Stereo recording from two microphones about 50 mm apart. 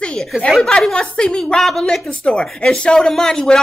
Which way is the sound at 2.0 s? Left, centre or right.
Left.